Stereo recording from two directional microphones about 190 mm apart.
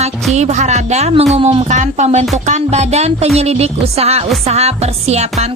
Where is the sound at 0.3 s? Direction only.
35° right (ahead or behind).